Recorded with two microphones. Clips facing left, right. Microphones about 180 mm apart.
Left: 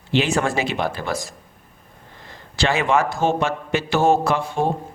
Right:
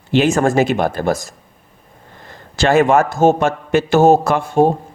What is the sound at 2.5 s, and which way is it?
A man's voice, 45° right (ahead or behind).